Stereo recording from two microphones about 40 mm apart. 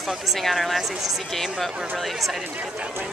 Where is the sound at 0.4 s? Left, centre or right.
Centre.